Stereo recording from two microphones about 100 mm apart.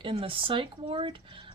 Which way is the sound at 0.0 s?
60° right (ahead or behind).